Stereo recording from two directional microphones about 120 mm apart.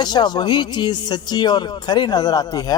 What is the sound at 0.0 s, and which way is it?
A man's voice, 35° left (ahead or behind).